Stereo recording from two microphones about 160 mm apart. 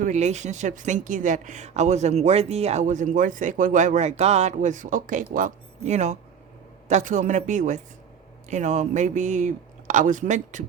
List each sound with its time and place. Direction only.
0.0 s speech: 45° right (ahead or behind)